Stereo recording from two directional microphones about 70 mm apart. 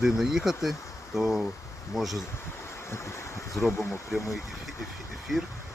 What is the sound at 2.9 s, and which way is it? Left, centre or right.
Speech, left.